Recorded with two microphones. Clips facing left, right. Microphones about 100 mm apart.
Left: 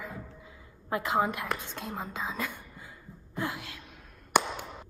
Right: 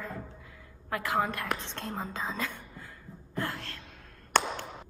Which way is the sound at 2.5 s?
15° left (ahead or behind).